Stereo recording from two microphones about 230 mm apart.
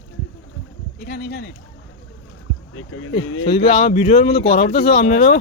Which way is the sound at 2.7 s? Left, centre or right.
Left.